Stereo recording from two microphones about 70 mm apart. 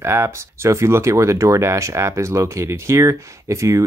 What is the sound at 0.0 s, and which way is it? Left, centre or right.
Speech, right.